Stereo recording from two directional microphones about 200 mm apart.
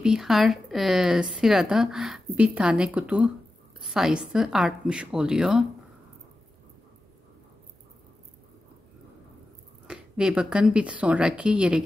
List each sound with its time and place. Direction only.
0.0 s speech: centre (ahead or behind)
9.8 s speech: 5° right (ahead or behind)